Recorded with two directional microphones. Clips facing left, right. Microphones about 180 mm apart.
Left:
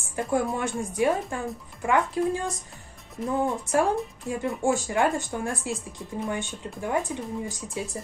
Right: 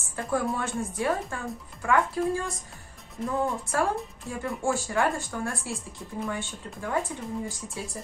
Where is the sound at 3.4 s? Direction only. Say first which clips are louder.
Left 4 dB; 20° left (ahead or behind).